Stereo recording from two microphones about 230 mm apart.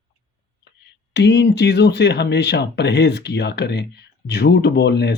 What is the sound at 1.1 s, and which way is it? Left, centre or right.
Speech, left.